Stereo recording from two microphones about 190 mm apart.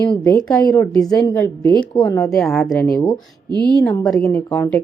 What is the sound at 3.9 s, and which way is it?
Speech, centre (ahead or behind).